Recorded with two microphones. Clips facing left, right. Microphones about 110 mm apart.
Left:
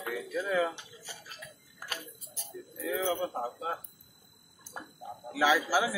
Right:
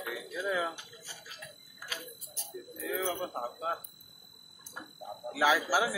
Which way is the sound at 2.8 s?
Centre (ahead or behind).